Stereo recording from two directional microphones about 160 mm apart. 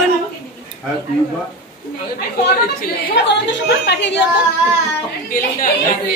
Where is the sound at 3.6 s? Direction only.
90° left.